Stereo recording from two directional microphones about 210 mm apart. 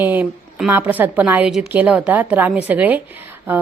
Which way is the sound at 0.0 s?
10° right (ahead or behind).